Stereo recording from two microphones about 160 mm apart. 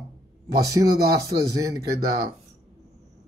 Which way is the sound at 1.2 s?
20° right (ahead or behind).